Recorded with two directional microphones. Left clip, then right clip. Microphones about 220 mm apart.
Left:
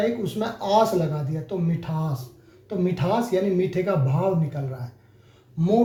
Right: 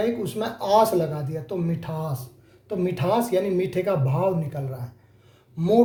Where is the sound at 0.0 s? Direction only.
45° right (ahead or behind).